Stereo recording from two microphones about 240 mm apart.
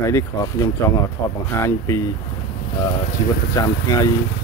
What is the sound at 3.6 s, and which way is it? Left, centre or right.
Speech, centre.